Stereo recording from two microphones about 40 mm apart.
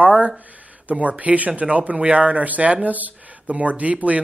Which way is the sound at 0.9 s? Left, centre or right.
Right.